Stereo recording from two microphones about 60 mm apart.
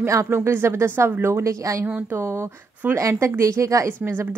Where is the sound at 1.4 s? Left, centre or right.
Right.